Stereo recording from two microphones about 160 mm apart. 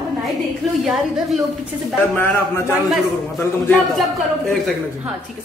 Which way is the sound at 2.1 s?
15° left (ahead or behind).